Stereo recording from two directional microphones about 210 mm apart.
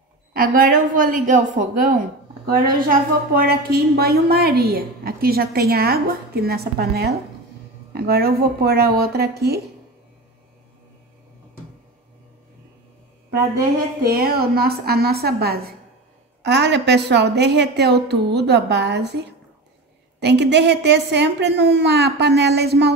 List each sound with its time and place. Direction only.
0.3 s a woman's voice: 40° right (ahead or behind)
13.3 s a woman's voice: 45° right (ahead or behind)